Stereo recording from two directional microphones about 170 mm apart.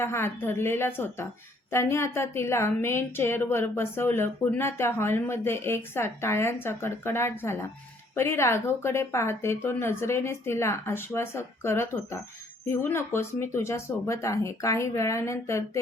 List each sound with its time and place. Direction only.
0.0 s speech: 15° left (ahead or behind)